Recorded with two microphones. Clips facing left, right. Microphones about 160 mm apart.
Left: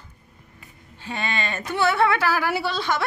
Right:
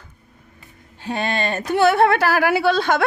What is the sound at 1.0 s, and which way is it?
A woman's voice, 45° right (ahead or behind).